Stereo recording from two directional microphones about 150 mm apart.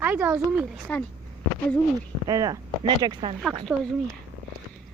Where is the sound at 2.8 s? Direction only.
35° right (ahead or behind).